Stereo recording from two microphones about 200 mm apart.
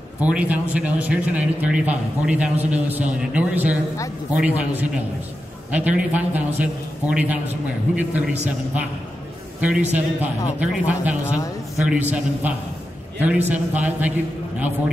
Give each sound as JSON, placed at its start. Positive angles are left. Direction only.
{"t": 0.2, "sound": "a man's voice", "side_deg": -5}
{"t": 11.3, "sound": "a sound", "side_deg": 15}
{"t": 11.8, "sound": "a man's voice", "side_deg": -10}